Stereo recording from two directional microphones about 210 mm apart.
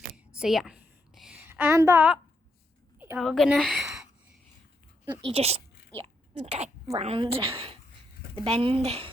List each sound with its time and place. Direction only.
0.3 s a sound: centre (ahead or behind)
3.2 s a woman's voice: centre (ahead or behind)
5.0 s a woman's voice: 25° right (ahead or behind)